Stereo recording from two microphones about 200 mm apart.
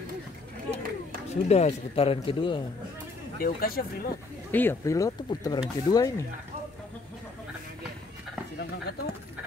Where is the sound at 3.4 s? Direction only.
50° left (ahead or behind).